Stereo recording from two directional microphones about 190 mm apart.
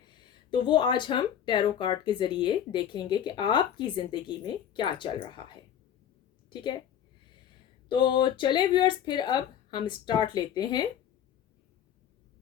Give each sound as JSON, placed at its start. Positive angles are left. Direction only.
{"t": 0.5, "sound": "speech", "side_deg": 25}
{"t": 6.5, "sound": "a woman's voice", "side_deg": 25}
{"t": 7.9, "sound": "speech", "side_deg": 25}